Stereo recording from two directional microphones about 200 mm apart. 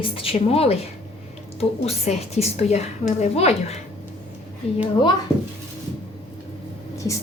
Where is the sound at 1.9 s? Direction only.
30° left (ahead or behind).